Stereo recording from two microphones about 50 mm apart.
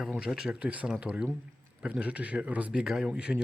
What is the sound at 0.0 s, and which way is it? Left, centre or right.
Speech, centre.